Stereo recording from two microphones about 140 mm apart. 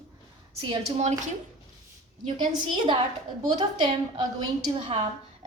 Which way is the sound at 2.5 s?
35° right (ahead or behind).